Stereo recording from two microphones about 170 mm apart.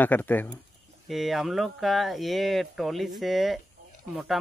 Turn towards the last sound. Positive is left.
turn(degrees=-5)  # may be behind; listen again after turning